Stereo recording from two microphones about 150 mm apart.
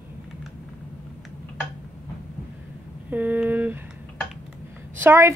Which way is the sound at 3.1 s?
10° right (ahead or behind).